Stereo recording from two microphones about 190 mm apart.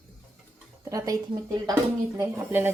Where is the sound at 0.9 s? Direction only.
20° right (ahead or behind).